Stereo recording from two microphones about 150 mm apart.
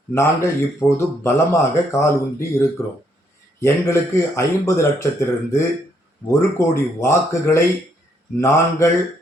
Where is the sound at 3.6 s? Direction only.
15° left (ahead or behind).